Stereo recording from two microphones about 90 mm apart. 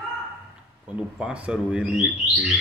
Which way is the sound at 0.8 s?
10° right (ahead or behind).